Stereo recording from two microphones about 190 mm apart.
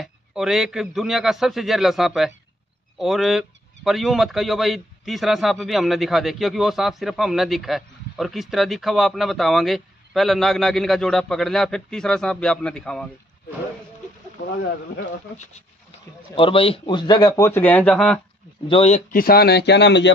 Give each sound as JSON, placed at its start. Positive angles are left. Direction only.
{"t": 0.0, "sound": "speech", "side_deg": 0}
{"t": 16.3, "sound": "a man's voice", "side_deg": 30}
{"t": 18.7, "sound": "speech", "side_deg": 30}
{"t": 19.1, "sound": "speech", "side_deg": 55}